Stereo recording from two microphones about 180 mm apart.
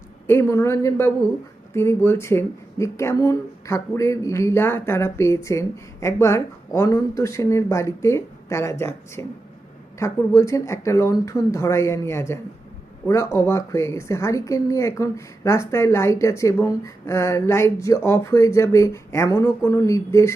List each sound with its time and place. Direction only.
0.3 s speech: 15° left (ahead or behind)